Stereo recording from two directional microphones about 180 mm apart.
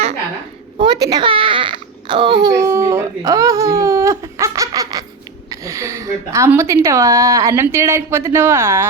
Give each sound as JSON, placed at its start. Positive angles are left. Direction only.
{"t": 0.8, "sound": "a child's voice", "side_deg": -20}